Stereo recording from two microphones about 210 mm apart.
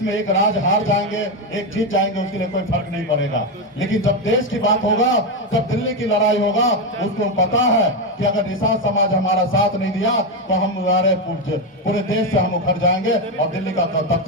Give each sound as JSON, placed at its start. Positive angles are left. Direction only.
{"t": 0.0, "sound": "a man's voice", "side_deg": 65}
{"t": 3.8, "sound": "a man's voice", "side_deg": 65}